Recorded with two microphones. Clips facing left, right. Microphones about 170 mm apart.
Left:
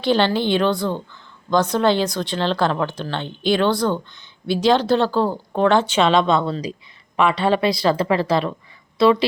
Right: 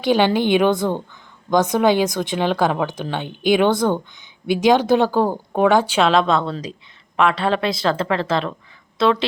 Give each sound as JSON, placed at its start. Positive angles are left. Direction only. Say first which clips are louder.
{"t": 0.0, "sound": "speech", "louder": "right 2 dB", "side_deg": -15}